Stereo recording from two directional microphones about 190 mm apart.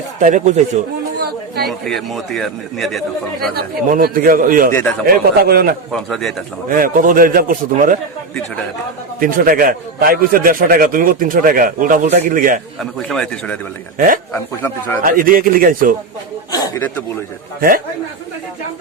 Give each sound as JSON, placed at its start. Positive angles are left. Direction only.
{"t": 0.2, "sound": "speech", "side_deg": -40}
{"t": 1.6, "sound": "a man's voice", "side_deg": 0}
{"t": 3.5, "sound": "a man's voice", "side_deg": -50}
{"t": 4.7, "sound": "speech", "side_deg": 10}
{"t": 5.0, "sound": "a man's voice", "side_deg": -55}
{"t": 5.9, "sound": "a man's voice", "side_deg": 0}
{"t": 6.7, "sound": "a man's voice", "side_deg": -45}
{"t": 9.2, "sound": "a man's voice", "side_deg": -45}
{"t": 12.8, "sound": "a man's voice", "side_deg": 0}
{"t": 15.0, "sound": "a man's voice", "side_deg": -50}
{"t": 16.5, "sound": "a sound", "side_deg": 15}